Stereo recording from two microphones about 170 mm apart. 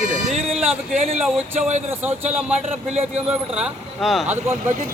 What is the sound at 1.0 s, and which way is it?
Speech, 40° right (ahead or behind).